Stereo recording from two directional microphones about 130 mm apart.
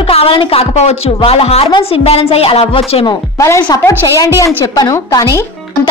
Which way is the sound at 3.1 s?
25° left (ahead or behind).